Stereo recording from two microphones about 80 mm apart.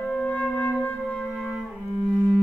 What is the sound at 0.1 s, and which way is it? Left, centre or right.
Music, centre.